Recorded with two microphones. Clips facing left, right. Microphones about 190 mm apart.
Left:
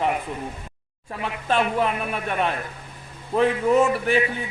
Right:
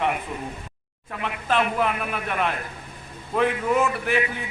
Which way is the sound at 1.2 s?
30° left (ahead or behind).